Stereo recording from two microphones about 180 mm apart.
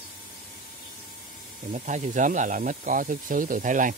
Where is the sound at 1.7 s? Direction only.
40° right (ahead or behind).